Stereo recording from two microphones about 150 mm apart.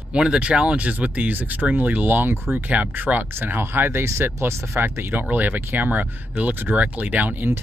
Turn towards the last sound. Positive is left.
turn(degrees=-15)  # may be behind; listen again after turning